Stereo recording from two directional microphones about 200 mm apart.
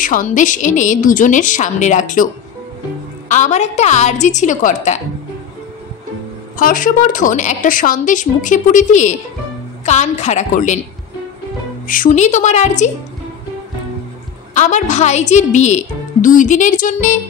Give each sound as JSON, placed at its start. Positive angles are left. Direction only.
{"t": 0.0, "sound": "a woman's voice", "side_deg": 40}
{"t": 3.3, "sound": "a woman's voice", "side_deg": 35}
{"t": 6.6, "sound": "a woman's voice", "side_deg": 40}
{"t": 11.9, "sound": "a woman's voice", "side_deg": 40}
{"t": 14.5, "sound": "a woman's voice", "side_deg": 35}